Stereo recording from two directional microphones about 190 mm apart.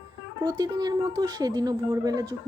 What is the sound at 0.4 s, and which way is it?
A woman's voice, 20° right (ahead or behind).